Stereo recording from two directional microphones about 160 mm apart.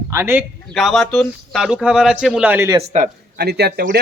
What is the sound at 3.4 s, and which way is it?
Speech, 85° right.